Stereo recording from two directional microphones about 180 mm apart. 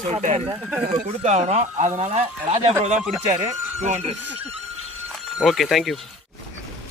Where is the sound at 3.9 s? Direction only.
40° right (ahead or behind).